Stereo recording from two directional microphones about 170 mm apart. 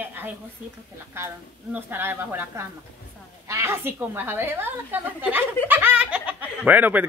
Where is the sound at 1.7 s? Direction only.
10° right (ahead or behind).